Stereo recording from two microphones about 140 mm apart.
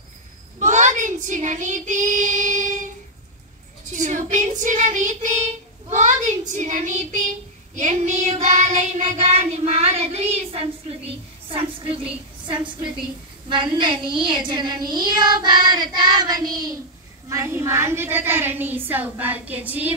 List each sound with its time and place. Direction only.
0.6 s child singing: 60° right (ahead or behind)
3.9 s child singing: 65° right (ahead or behind); by 10.7 s 45° right (ahead or behind)
11.4 s a sound: 40° right (ahead or behind)
12.5 s a woman's voice: 35° right (ahead or behind); by 19.9 s 10° right (ahead or behind)